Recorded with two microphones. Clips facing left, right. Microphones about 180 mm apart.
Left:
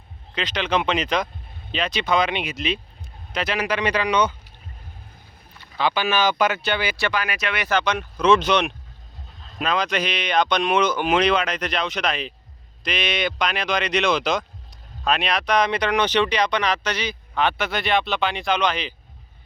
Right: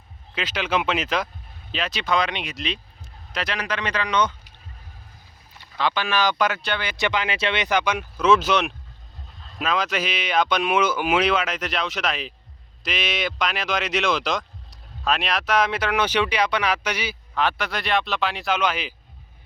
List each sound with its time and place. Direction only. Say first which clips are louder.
0.3 s speech: left 1 dB; 5° right (ahead or behind); by 4.4 s 10° left (ahead or behind)
5.7 s speech: left 2 dB; 5° left (ahead or behind)
6.9 s speech: right 1 dB; 20° right (ahead or behind)